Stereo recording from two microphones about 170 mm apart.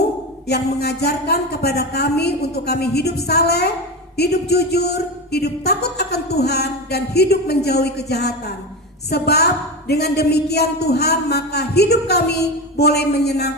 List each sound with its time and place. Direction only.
0.4 s a woman's voice: 70° left (ahead or behind)